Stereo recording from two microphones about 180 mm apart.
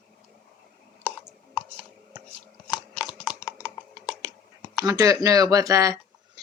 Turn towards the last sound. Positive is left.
turn(degrees=-20)  # may be behind; listen again after turning